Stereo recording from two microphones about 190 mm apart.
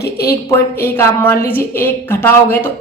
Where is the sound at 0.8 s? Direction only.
15° left (ahead or behind).